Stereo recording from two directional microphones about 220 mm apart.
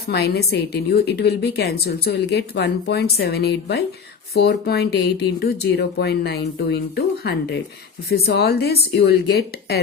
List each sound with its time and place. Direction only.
0.1 s a woman's voice: 45° left (ahead or behind)